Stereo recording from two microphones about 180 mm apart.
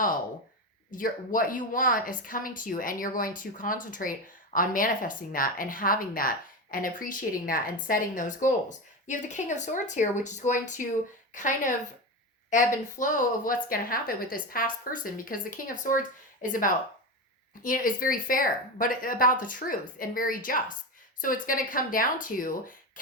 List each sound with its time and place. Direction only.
0.9 s a woman's voice: 50° left (ahead or behind)